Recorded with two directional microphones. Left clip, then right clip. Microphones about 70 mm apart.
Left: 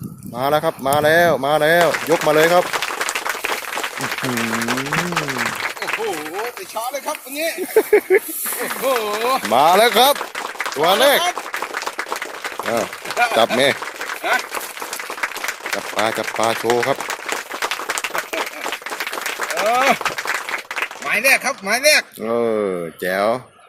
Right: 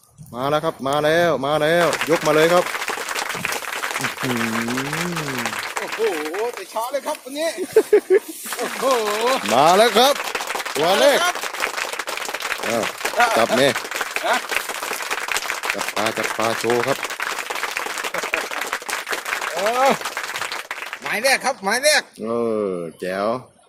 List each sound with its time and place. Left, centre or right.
0.3 s speech: centre
5.9 s a sound: centre
6.9 s speech: right
7.8 s speech: centre
10.6 s applause: centre
12.6 s speech: centre
15.2 s applause: centre
19.5 s applause: centre
21.2 s speech: right
22.3 s speech: left
23.0 s speech: centre